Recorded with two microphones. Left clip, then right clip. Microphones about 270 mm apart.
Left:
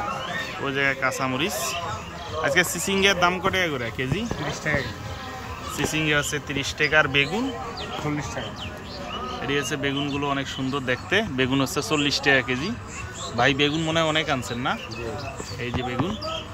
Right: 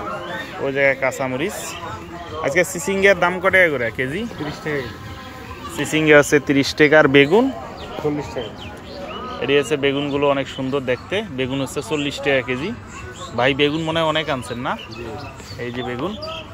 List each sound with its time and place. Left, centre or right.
0.7 s speech: centre
5.9 s speech: centre
9.4 s speech: centre